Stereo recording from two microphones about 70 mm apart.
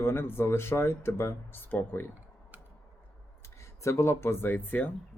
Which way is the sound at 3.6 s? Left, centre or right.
Left.